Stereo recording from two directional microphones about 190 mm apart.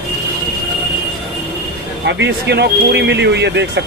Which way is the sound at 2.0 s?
65° right (ahead or behind).